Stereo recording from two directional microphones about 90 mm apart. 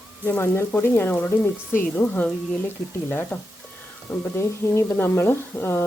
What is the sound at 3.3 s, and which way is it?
Speech, 15° left (ahead or behind).